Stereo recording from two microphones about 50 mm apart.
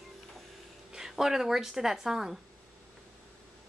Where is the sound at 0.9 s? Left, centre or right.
Centre.